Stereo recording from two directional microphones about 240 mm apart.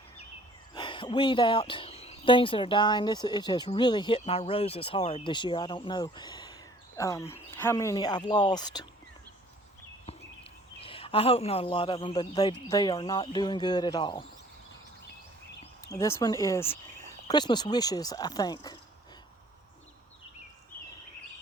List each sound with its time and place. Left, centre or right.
0.7 s speech: centre
10.8 s speech: left
15.9 s speech: centre